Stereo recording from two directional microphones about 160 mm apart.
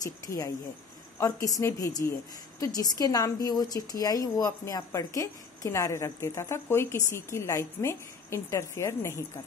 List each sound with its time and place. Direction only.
0.0 s a woman's voice: 20° left (ahead or behind)